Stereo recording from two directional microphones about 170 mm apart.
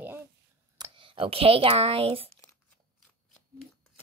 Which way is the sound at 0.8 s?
30° right (ahead or behind).